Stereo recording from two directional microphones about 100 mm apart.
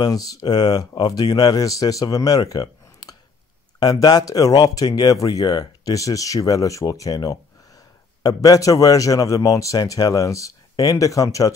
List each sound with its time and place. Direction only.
0.0 s speech: 40° left (ahead or behind)